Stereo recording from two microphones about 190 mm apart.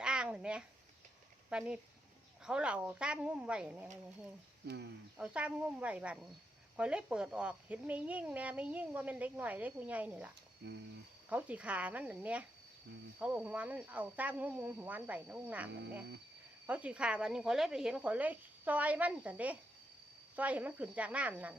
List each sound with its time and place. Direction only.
0.0 s a sound: 5° right (ahead or behind)
1.5 s speech: 5° right (ahead or behind)
5.1 s speech: 5° right (ahead or behind)
10.6 s speech: 60° right (ahead or behind)
11.3 s speech: 10° right (ahead or behind)